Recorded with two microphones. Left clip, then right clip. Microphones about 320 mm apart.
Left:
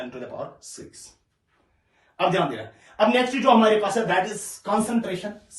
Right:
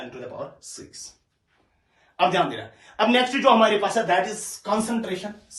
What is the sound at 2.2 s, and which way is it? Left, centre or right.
Speech, centre.